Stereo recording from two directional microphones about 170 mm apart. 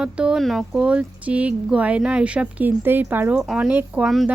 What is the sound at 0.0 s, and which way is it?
Speech, 5° right (ahead or behind).